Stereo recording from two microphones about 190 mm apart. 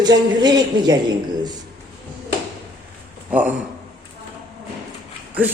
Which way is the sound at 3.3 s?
10° right (ahead or behind).